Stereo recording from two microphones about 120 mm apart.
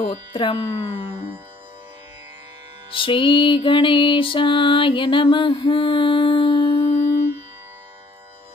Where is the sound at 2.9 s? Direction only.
45° left (ahead or behind).